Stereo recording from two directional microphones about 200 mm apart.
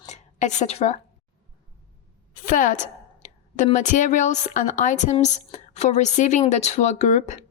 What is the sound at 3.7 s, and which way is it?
A woman's voice, 40° left (ahead or behind).